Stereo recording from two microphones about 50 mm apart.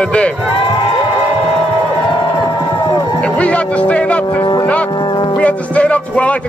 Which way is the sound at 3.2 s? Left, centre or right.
Left.